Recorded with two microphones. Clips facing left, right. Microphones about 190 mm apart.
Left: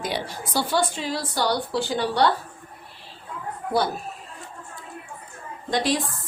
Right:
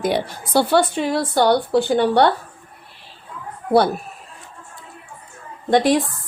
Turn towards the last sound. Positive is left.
turn(degrees=-55)  # may be behind; listen again after turning